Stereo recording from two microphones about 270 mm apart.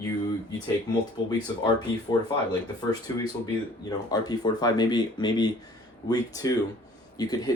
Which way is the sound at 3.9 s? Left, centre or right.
Centre.